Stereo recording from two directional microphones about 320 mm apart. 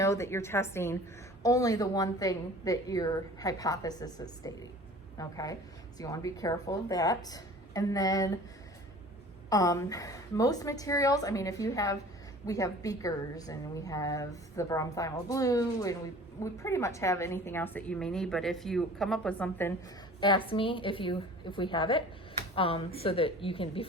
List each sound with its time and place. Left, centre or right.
0.0 s a woman's voice: centre
9.5 s a woman's voice: centre
20.5 s a woman's voice: centre